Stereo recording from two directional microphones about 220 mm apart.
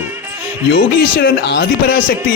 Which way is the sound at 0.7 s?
50° left (ahead or behind).